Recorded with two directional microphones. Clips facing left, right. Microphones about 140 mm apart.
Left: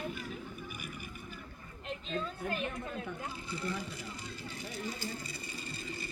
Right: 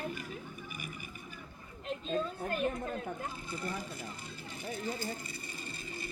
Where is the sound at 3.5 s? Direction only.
45° right (ahead or behind).